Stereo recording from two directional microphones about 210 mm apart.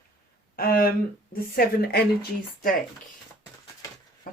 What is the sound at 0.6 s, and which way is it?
Speech, 45° left (ahead or behind).